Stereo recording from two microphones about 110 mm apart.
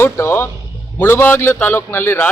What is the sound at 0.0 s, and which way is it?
A man's voice, 20° left (ahead or behind).